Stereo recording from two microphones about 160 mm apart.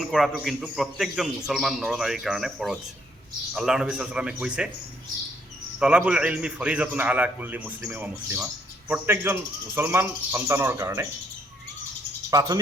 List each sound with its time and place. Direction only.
0.1 s a man's voice: centre (ahead or behind)
5.8 s speech: 5° right (ahead or behind)
12.3 s speech: 20° right (ahead or behind)